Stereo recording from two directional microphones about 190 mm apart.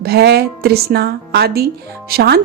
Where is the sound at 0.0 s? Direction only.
55° right (ahead or behind).